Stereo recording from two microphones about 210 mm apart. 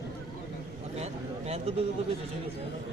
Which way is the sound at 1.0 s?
30° right (ahead or behind).